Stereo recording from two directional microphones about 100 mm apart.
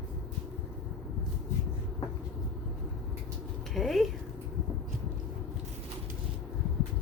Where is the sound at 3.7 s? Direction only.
Centre (ahead or behind).